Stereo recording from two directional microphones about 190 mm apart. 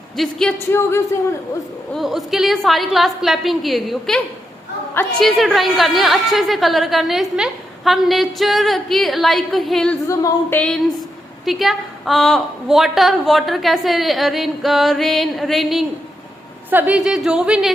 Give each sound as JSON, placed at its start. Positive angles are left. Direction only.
{"t": 0.2, "sound": "a woman's voice", "side_deg": 0}
{"t": 0.7, "sound": "speech", "side_deg": 15}
{"t": 2.0, "sound": "a woman's voice", "side_deg": 0}
{"t": 5.2, "sound": "a woman's voice", "side_deg": 0}
{"t": 10.1, "sound": "speech", "side_deg": 15}
{"t": 11.4, "sound": "a woman's voice", "side_deg": 0}